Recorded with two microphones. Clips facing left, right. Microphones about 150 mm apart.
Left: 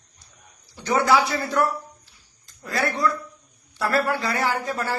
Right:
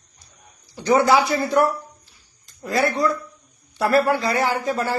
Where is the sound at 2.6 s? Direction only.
20° right (ahead or behind).